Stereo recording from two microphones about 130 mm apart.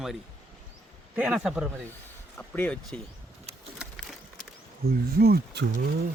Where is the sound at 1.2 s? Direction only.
5° right (ahead or behind).